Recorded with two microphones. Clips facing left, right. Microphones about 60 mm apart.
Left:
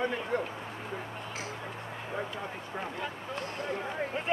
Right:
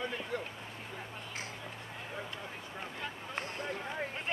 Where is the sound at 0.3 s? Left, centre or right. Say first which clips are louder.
Left 7 dB; left.